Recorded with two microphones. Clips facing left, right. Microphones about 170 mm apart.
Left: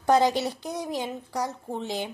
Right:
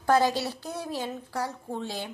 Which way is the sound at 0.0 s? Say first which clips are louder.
Left 2 dB; 20° left (ahead or behind).